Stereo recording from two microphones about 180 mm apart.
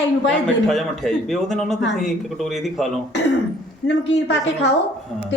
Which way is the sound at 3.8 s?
75° left (ahead or behind).